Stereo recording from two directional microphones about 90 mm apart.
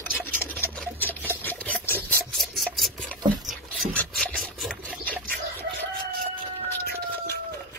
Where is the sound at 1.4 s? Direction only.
20° left (ahead or behind).